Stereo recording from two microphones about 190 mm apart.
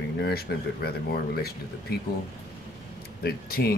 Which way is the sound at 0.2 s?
55° left (ahead or behind).